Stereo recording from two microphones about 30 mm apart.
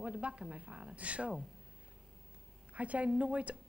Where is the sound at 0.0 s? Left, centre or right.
Right.